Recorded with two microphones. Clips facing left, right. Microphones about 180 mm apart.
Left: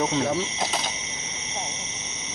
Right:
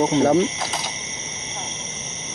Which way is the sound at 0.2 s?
55° right (ahead or behind).